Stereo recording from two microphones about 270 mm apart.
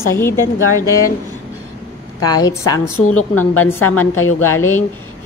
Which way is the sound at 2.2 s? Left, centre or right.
Centre.